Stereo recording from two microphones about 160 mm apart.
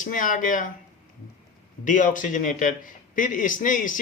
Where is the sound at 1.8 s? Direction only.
55° left (ahead or behind).